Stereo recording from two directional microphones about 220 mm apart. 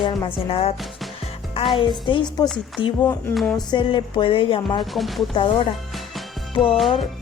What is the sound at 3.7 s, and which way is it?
A woman's voice, 20° left (ahead or behind).